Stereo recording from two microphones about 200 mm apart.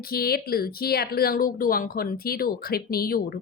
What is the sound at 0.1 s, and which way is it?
Speech, 50° left (ahead or behind).